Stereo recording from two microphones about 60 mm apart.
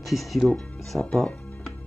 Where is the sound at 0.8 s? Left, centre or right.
Centre.